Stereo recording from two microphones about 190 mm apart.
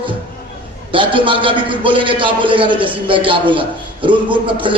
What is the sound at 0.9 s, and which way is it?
A man's voice, 25° right (ahead or behind).